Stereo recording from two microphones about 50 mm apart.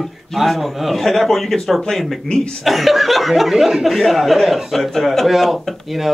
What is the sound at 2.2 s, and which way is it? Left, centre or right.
Speech, centre.